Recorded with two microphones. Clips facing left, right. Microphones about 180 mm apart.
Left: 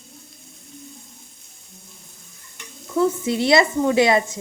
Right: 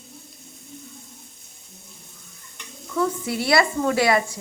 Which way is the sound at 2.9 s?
25° left (ahead or behind).